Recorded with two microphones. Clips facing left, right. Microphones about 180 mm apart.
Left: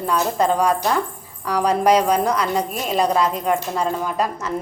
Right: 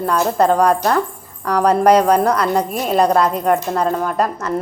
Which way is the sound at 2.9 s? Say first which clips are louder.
Right 4 dB; 60° right (ahead or behind).